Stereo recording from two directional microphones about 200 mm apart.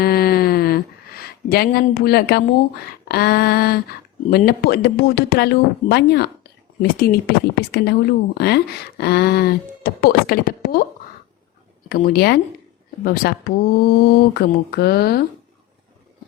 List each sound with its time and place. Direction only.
0.0 s a sound: 50° left (ahead or behind)
4.3 s speech: 50° left (ahead or behind)
11.9 s speech: 45° left (ahead or behind)